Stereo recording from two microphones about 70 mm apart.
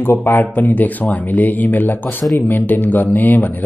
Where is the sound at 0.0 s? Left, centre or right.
Left.